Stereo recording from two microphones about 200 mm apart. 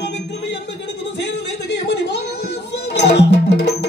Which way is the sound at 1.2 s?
60° left (ahead or behind).